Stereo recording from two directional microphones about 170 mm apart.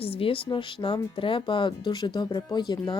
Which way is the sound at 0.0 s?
35° left (ahead or behind).